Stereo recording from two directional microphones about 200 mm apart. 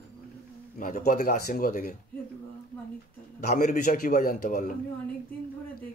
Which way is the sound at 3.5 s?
40° left (ahead or behind).